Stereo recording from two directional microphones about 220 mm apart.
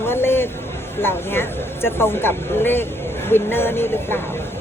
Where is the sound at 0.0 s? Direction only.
10° left (ahead or behind).